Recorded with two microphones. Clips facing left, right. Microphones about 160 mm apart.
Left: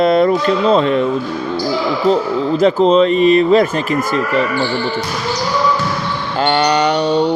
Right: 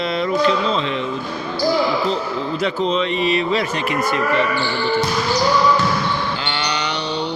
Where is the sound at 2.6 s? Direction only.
40° left (ahead or behind).